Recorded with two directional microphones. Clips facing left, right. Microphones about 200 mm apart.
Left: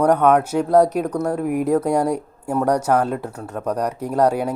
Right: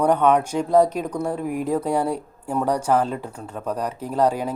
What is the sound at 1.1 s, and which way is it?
Speech, 10° right (ahead or behind).